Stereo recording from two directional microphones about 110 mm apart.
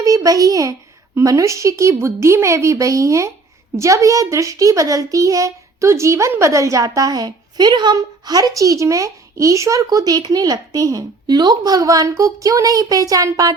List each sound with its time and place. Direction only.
0.0 s a woman's voice: 30° right (ahead or behind)